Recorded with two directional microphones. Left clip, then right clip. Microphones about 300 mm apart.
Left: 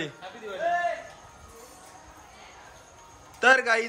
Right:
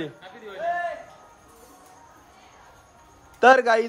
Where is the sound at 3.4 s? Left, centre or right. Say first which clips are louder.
Right 4 dB; centre.